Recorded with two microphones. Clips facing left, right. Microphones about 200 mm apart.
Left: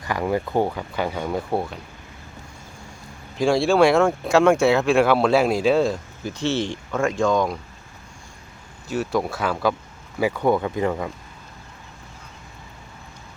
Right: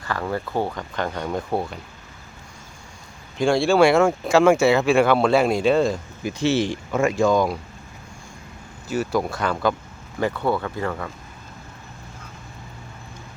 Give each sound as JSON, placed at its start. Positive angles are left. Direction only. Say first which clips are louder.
{"t": 0.0, "sound": "speech", "louder": "left 3 dB", "side_deg": 15}
{"t": 3.3, "sound": "speech", "louder": "even", "side_deg": 0}
{"t": 6.2, "sound": "speech", "louder": "right 3 dB", "side_deg": -10}
{"t": 8.9, "sound": "speech", "louder": "even", "side_deg": 0}